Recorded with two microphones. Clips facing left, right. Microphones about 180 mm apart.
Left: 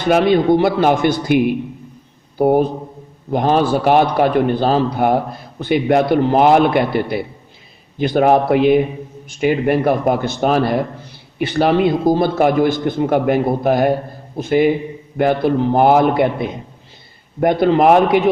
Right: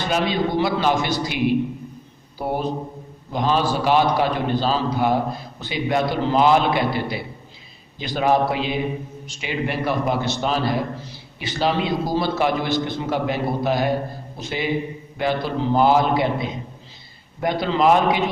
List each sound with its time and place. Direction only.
0.0 s a man's voice: 60° left (ahead or behind)